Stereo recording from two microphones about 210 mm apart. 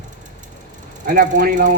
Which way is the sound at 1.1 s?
40° right (ahead or behind).